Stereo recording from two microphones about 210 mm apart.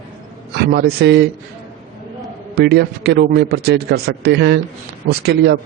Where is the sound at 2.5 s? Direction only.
50° right (ahead or behind).